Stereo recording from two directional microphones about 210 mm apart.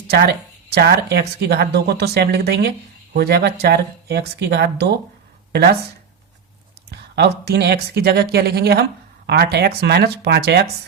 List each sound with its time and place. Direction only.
0.1 s speech: 50° right (ahead or behind)
6.9 s speech: 50° right (ahead or behind)